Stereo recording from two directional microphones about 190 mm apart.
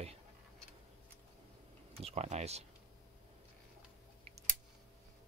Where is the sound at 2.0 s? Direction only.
35° right (ahead or behind).